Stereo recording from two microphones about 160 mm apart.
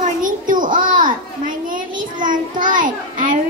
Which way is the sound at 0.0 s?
55° right (ahead or behind).